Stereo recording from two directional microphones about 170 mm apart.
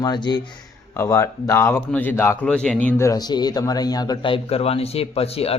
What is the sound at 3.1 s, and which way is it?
A man's voice, 25° left (ahead or behind).